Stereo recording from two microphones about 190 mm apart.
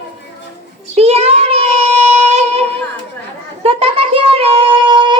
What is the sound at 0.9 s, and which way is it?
Child singing, 30° right (ahead or behind).